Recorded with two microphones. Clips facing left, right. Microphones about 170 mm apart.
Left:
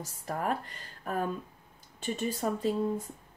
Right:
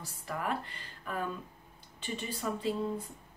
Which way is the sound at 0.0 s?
45° left (ahead or behind).